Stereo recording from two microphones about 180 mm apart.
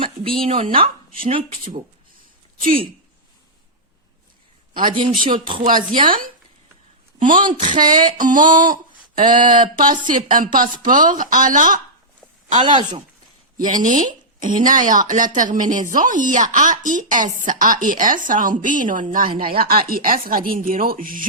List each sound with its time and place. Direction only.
0.0 s speech: 30° right (ahead or behind)
2.6 s speech: 50° right (ahead or behind)
5.3 s speech: 25° right (ahead or behind)
5.6 s a woman's voice: 50° right (ahead or behind)
7.6 s a sound: 45° right (ahead or behind)
9.5 s a woman's voice: 45° right (ahead or behind)
12.6 s speech: 25° right (ahead or behind)
13.7 s a woman's voice: 45° right (ahead or behind)